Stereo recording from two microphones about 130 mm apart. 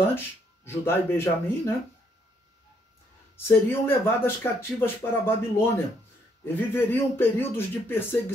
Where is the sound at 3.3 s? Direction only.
15° left (ahead or behind).